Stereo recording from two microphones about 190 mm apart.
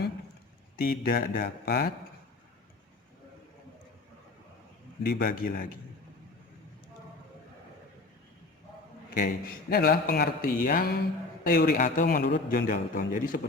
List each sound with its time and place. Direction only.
0.8 s speech: 50° left (ahead or behind)
5.0 s speech: 55° left (ahead or behind)
9.1 s speech: 50° left (ahead or behind)